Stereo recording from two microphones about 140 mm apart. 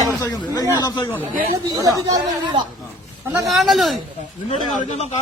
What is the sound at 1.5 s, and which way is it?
Speech, 25° right (ahead or behind).